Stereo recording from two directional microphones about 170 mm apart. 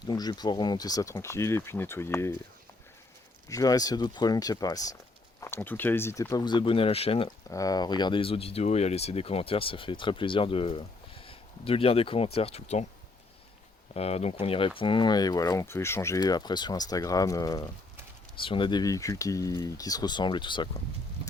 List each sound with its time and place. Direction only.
0.0 s speech: 25° left (ahead or behind)
3.5 s speech: 20° left (ahead or behind)
7.5 s speech: 20° left (ahead or behind); by 12.8 s 40° left (ahead or behind)
13.9 s speech: 35° left (ahead or behind)